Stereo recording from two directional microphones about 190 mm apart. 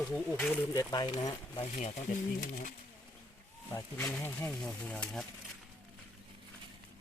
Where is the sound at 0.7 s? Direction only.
20° left (ahead or behind).